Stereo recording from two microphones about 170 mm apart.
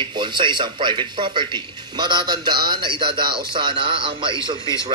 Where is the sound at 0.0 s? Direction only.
25° right (ahead or behind).